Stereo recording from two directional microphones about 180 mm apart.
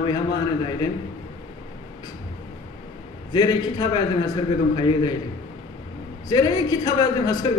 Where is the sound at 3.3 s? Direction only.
25° left (ahead or behind).